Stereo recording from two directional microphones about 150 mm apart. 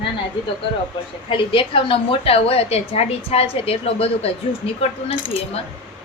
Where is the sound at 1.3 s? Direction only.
35° left (ahead or behind).